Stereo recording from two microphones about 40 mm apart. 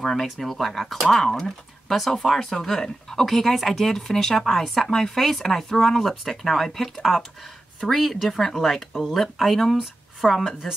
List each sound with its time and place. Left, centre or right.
0.0 s speech: centre